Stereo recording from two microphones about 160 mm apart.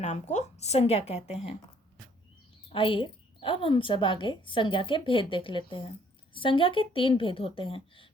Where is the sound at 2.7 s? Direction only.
35° left (ahead or behind).